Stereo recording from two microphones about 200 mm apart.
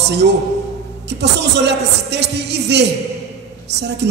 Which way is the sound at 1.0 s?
55° right (ahead or behind).